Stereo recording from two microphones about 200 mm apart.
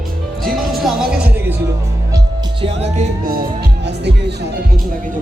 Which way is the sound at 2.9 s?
45° right (ahead or behind).